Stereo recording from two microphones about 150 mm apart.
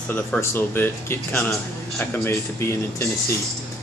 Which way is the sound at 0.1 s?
15° left (ahead or behind).